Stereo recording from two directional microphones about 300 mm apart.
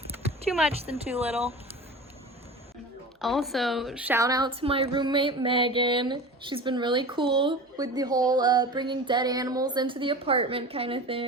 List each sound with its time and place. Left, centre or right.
0.7 s speech: centre
3.2 s a woman's voice: centre